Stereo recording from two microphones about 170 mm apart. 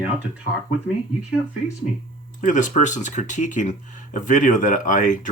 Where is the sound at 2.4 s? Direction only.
50° left (ahead or behind).